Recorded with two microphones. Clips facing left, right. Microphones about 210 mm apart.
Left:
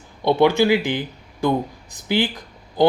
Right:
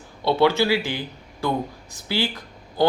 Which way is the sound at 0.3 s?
15° left (ahead or behind).